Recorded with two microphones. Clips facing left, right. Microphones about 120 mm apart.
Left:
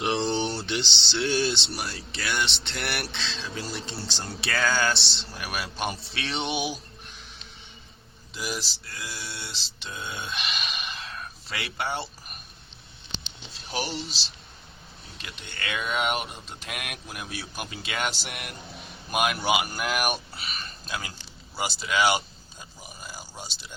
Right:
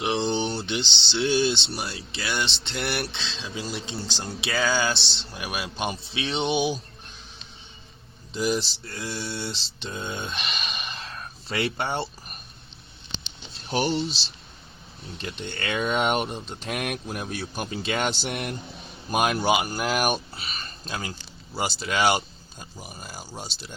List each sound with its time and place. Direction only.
0.0 s a sound: centre (ahead or behind)
0.3 s speech: 20° right (ahead or behind)
8.3 s mantra: 30° right (ahead or behind)
13.7 s speech: 35° right (ahead or behind)
15.2 s speech: 35° right (ahead or behind)